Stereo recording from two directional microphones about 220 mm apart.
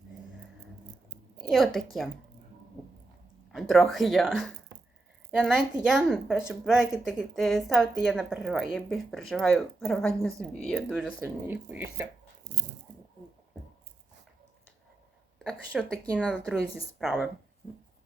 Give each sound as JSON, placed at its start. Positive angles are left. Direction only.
{"t": 1.5, "sound": "a woman's voice", "side_deg": 0}
{"t": 3.5, "sound": "a woman's voice", "side_deg": 0}
{"t": 15.4, "sound": "a woman's voice", "side_deg": -5}